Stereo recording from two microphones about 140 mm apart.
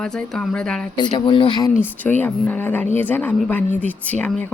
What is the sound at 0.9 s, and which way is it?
Speech, 30° left (ahead or behind).